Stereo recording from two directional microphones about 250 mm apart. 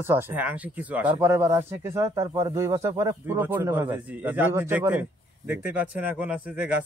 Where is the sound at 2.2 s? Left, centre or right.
Right.